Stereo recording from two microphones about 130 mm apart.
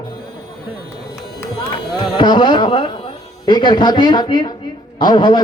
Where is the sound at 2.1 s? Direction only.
40° left (ahead or behind).